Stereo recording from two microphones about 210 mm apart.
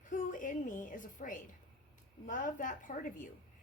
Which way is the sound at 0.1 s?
40° left (ahead or behind).